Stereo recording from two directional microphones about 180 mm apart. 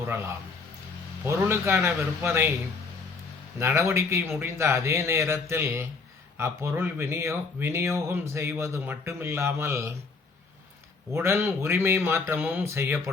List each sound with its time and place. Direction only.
1.2 s speech: 15° right (ahead or behind)
3.6 s speech: 15° right (ahead or behind)
11.1 s speech: 15° right (ahead or behind)